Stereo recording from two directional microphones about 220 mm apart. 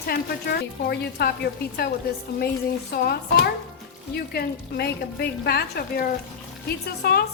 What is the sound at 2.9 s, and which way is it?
A woman's voice, 45° left (ahead or behind).